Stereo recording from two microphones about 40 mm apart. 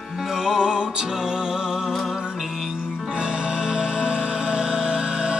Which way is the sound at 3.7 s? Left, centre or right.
Centre.